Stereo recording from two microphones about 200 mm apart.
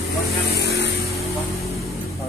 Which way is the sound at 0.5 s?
60° left (ahead or behind).